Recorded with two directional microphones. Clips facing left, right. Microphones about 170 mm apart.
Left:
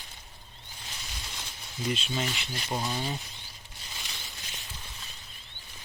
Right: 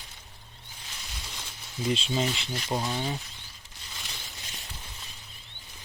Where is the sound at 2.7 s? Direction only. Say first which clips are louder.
Right 2 dB; 10° right (ahead or behind).